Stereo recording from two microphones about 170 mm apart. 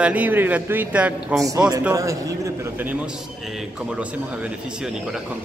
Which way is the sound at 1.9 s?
20° right (ahead or behind).